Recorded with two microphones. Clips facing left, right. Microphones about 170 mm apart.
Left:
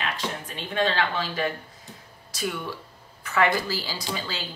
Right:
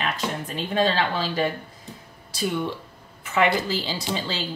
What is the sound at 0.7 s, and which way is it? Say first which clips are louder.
Speech: right 2 dB; 35° right (ahead or behind).